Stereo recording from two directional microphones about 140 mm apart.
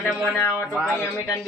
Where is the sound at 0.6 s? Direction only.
10° right (ahead or behind).